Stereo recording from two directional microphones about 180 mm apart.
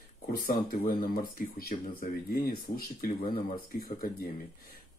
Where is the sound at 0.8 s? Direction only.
55° left (ahead or behind).